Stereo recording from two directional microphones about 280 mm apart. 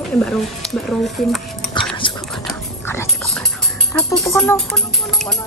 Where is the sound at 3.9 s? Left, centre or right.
Centre.